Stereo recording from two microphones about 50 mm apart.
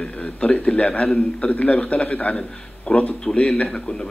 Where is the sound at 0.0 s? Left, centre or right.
Left.